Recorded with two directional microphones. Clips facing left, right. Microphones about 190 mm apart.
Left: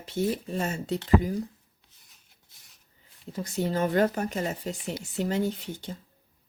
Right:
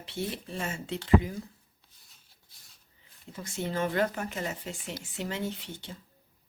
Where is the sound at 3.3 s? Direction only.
40° left (ahead or behind).